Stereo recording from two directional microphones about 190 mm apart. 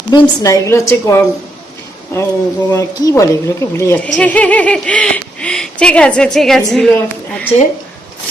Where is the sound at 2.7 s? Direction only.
15° left (ahead or behind).